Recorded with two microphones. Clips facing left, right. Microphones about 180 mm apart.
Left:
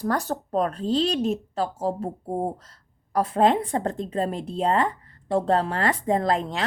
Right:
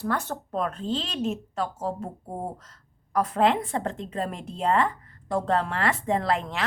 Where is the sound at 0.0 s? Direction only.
40° left (ahead or behind).